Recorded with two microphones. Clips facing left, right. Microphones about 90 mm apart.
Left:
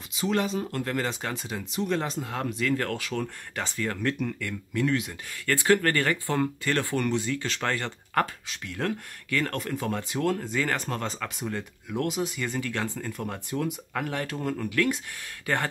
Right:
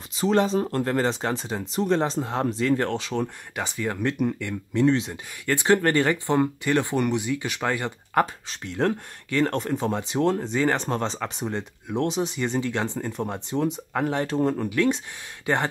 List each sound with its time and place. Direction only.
0.1 s speech: 35° right (ahead or behind); by 8.3 s 15° right (ahead or behind)
8.5 s speech: 30° right (ahead or behind)